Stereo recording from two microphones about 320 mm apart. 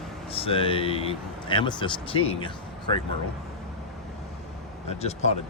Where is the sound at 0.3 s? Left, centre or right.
Centre.